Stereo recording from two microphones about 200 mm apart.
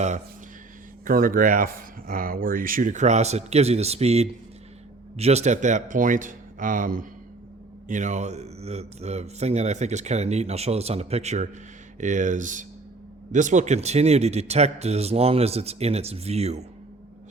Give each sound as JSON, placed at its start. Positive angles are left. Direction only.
{"t": 1.0, "sound": "speech", "side_deg": -45}